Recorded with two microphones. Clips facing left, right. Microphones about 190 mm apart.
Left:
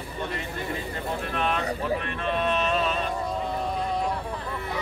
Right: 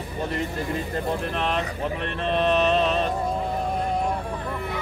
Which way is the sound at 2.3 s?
35° right (ahead or behind).